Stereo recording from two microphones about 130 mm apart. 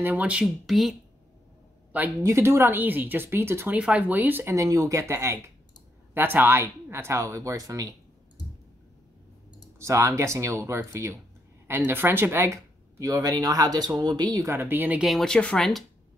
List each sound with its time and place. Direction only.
0.0 s speech: 10° right (ahead or behind)
2.2 s speech: 20° right (ahead or behind)
9.8 s speech: 25° right (ahead or behind)
15.0 s speech: 5° left (ahead or behind)